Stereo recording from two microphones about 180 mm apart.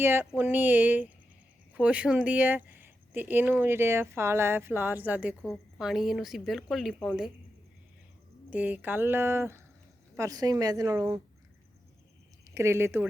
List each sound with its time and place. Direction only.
0.0 s a woman's voice: 15° right (ahead or behind)
8.4 s a woman's voice: 10° right (ahead or behind)
12.5 s speech: 15° right (ahead or behind)